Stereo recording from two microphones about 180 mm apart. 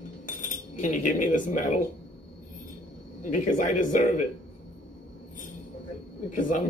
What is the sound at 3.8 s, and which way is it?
Speech, 45° left (ahead or behind).